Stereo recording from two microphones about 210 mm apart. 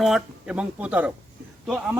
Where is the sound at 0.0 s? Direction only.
5° right (ahead or behind).